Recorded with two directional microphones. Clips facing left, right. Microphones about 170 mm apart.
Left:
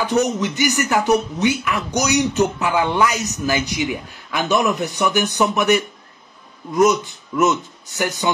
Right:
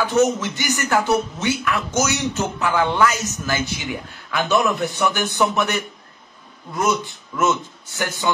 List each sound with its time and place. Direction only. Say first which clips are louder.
0.0 s speech: right 1 dB; 15° left (ahead or behind)